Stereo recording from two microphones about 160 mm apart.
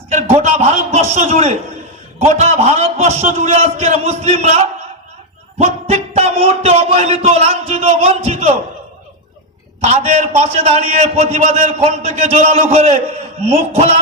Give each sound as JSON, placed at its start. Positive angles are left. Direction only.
{"t": 0.1, "sound": "a sound", "side_deg": -45}
{"t": 2.1, "sound": "a man's voice", "side_deg": -45}
{"t": 9.8, "sound": "a man's voice", "side_deg": -45}